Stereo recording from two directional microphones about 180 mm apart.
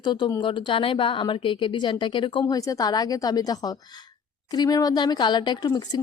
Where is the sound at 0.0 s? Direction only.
25° left (ahead or behind).